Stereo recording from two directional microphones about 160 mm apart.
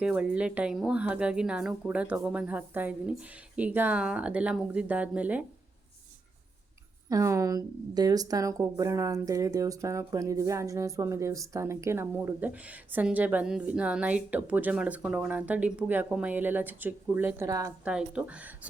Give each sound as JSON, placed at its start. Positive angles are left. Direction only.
{"t": 0.0, "sound": "a woman's voice", "side_deg": -5}
{"t": 7.1, "sound": "a woman's voice", "side_deg": -20}
{"t": 17.8, "sound": "a woman's voice", "side_deg": -5}